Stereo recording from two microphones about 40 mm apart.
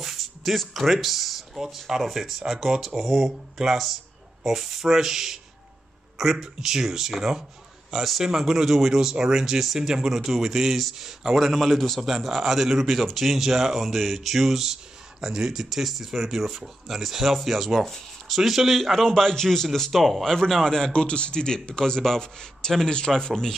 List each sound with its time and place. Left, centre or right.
0.0 s a sound: centre
2.0 s speech: centre
19.0 s a man's voice: centre
19.9 s speech: centre
20.2 s a man's voice: centre